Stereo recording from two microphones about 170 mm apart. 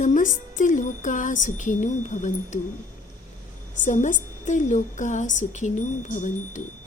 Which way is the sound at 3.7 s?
45° left (ahead or behind).